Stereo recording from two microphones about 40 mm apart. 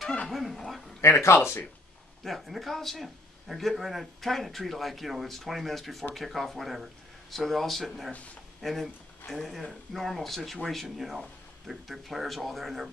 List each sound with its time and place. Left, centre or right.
0.3 s a sound: centre
1.1 s speech: left
2.2 s speech: centre